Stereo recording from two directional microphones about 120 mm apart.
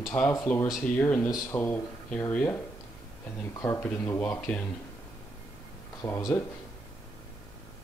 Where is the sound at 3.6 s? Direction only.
15° left (ahead or behind).